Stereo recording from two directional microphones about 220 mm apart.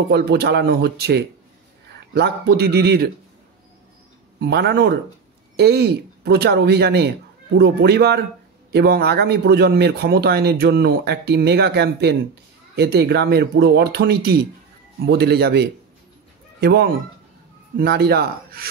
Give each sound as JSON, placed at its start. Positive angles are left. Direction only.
{"t": 0.1, "sound": "speech", "side_deg": -45}
{"t": 4.4, "sound": "speech", "side_deg": -50}
{"t": 17.7, "sound": "speech", "side_deg": -45}